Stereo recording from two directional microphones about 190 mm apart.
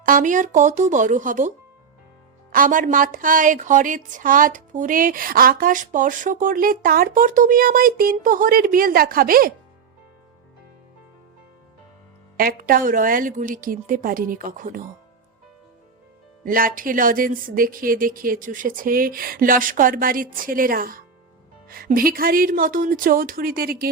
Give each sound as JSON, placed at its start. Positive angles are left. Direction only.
{"t": 0.0, "sound": "a woman's voice", "side_deg": -45}
{"t": 12.4, "sound": "a woman's voice", "side_deg": -50}
{"t": 16.4, "sound": "a woman's voice", "side_deg": -50}